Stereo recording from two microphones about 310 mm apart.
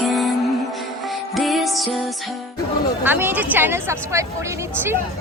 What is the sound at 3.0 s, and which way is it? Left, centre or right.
Speech, centre.